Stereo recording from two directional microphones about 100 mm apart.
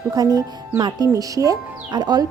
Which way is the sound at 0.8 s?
50° right (ahead or behind).